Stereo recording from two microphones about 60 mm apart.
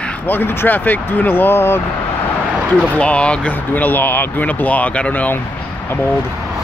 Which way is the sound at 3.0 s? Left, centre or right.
Centre.